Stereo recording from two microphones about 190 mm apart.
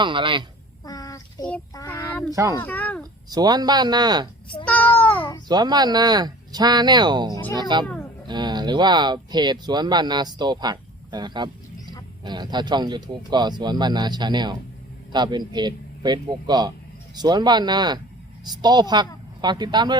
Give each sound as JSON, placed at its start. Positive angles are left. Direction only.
{"t": 0.0, "sound": "speech", "side_deg": -25}
{"t": 0.9, "sound": "child singing", "side_deg": 20}
{"t": 2.3, "sound": "speech", "side_deg": -15}
{"t": 2.6, "sound": "a sound", "side_deg": 10}
{"t": 3.2, "sound": "speech", "side_deg": -20}
{"t": 4.6, "sound": "a sound", "side_deg": 10}
{"t": 4.9, "sound": "baby cry", "side_deg": 10}
{"t": 5.5, "sound": "speech", "side_deg": -20}